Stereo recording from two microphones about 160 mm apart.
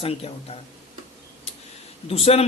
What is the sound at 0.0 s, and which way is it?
Speech, 40° left (ahead or behind).